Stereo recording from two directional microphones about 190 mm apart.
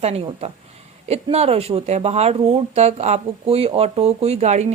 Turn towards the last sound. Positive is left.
turn(degrees=-35)  # may be behind; listen again after turning